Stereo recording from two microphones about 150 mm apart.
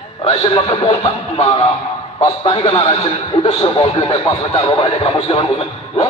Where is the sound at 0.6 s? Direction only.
40° left (ahead or behind).